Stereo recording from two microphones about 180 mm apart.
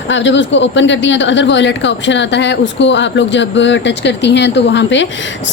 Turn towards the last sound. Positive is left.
turn(degrees=85)